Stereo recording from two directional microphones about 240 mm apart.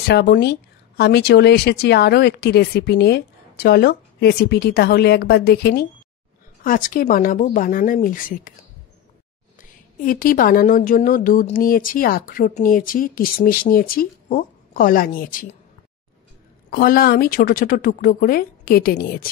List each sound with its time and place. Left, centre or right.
0.1 s speech: left
9.6 s speech: left
16.7 s speech: left